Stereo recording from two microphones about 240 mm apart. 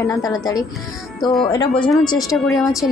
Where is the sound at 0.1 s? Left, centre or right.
Centre.